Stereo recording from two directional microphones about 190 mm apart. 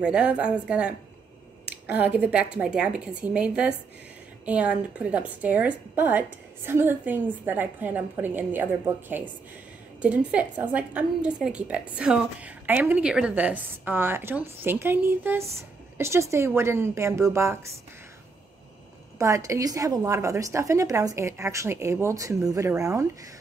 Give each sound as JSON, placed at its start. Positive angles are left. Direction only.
{"t": 0.0, "sound": "a woman's voice", "side_deg": -5}
{"t": 19.1, "sound": "a woman's voice", "side_deg": -15}